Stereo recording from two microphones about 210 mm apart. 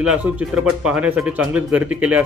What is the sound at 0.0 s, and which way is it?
Speech, 5° right (ahead or behind).